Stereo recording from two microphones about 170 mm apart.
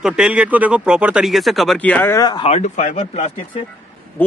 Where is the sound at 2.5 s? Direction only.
40° left (ahead or behind).